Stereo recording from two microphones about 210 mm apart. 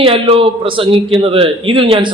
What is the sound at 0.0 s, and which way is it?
A man's voice, 25° right (ahead or behind).